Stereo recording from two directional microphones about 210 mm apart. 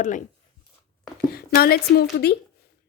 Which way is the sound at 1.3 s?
45° left (ahead or behind).